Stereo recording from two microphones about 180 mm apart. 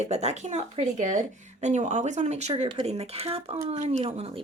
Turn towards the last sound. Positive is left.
turn(degrees=-30)  # may be behind; listen again after turning